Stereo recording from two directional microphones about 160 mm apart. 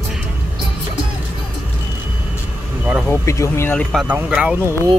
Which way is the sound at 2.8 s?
10° right (ahead or behind).